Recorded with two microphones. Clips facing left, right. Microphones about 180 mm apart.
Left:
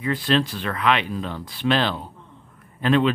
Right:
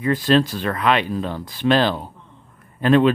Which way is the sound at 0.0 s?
45° right (ahead or behind).